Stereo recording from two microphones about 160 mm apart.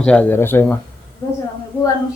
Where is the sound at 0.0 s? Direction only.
5° left (ahead or behind).